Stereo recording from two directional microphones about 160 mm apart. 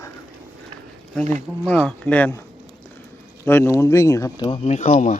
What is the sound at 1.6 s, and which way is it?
Speech, 5° left (ahead or behind).